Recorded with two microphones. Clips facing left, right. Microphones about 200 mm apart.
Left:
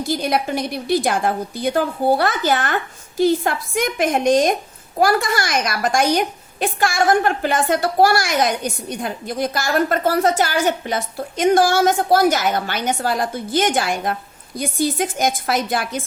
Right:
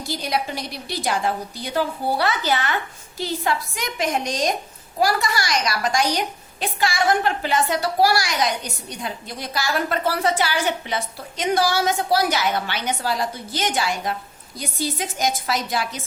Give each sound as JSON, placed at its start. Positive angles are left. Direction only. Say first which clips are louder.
{"t": 0.1, "sound": "a woman's voice", "louder": "left 4 dB", "side_deg": 55}